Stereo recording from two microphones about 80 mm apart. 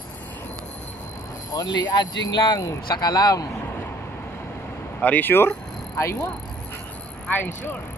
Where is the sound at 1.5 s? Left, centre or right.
Left.